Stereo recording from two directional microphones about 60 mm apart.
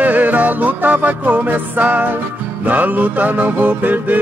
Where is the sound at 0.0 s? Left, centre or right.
Right.